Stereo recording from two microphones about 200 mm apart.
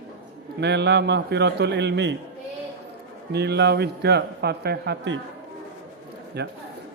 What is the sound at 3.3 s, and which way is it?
A man's voice, 55° right (ahead or behind).